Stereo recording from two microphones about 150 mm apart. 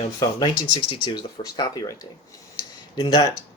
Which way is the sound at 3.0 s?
30° left (ahead or behind).